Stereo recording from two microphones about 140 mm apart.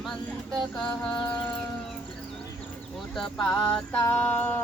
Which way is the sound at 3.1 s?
5° left (ahead or behind).